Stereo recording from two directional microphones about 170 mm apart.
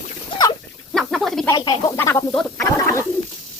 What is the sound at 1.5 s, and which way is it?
Speech, 25° left (ahead or behind).